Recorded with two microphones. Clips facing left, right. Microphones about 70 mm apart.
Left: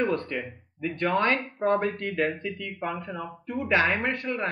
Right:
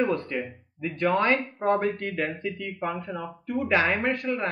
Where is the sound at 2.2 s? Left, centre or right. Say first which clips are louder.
Left 1 dB; right.